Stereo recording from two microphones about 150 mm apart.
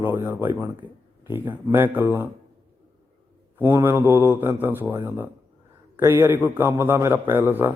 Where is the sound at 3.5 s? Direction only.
15° right (ahead or behind).